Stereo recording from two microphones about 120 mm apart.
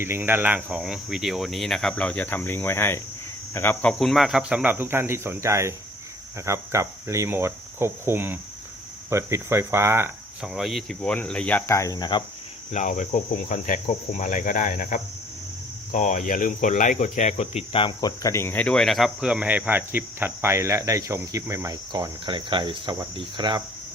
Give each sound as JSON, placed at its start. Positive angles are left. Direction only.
{"t": 0.0, "sound": "speech", "side_deg": -20}
{"t": 0.8, "sound": "speech", "side_deg": -5}
{"t": 3.9, "sound": "speech", "side_deg": 0}
{"t": 6.4, "sound": "cricket", "side_deg": -25}
{"t": 10.4, "sound": "speech", "side_deg": 0}
{"t": 11.6, "sound": "speech", "side_deg": 25}
{"t": 12.7, "sound": "speech", "side_deg": 85}
{"t": 13.1, "sound": "cricket", "side_deg": 90}
{"t": 15.9, "sound": "speech", "side_deg": 85}
{"t": 18.0, "sound": "speech", "side_deg": 30}